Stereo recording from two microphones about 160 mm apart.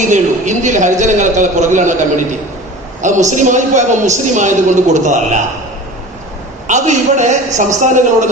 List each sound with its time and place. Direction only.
0.0 s a man's voice: 50° right (ahead or behind)
6.7 s a man's voice: 50° right (ahead or behind)